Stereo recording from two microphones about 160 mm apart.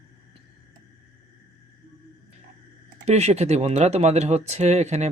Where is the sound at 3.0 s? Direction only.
40° right (ahead or behind).